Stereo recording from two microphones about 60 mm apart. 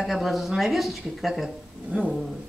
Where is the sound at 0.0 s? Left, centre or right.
Centre.